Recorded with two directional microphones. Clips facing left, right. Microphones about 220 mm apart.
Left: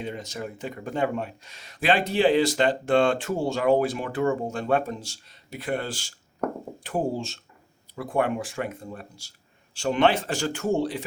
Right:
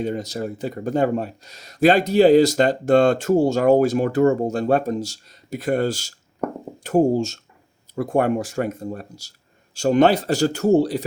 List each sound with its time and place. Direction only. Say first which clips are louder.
0.0 s speech: right 8 dB; 40° right (ahead or behind)